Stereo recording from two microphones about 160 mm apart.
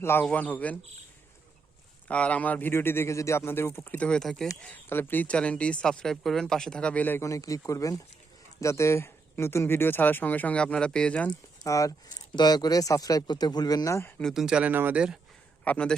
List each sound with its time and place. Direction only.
0.0 s speech: 15° left (ahead or behind)
2.0 s speech: 10° left (ahead or behind)
11.6 s speech: 20° left (ahead or behind)
14.2 s speech: centre (ahead or behind)
15.6 s speech: 5° left (ahead or behind)